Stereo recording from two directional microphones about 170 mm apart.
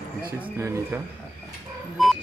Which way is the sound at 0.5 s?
15° right (ahead or behind).